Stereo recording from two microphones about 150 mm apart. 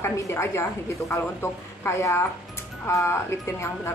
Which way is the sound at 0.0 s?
20° left (ahead or behind).